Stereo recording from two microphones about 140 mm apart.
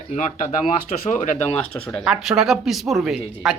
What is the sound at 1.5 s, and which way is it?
Speech, 10° left (ahead or behind).